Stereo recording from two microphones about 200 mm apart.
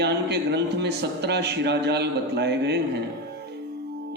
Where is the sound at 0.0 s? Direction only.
55° right (ahead or behind).